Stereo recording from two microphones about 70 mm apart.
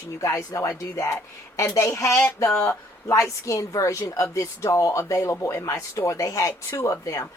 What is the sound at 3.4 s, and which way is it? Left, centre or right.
Speech, left.